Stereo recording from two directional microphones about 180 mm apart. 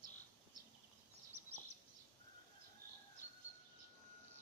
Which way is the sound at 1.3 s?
35° right (ahead or behind).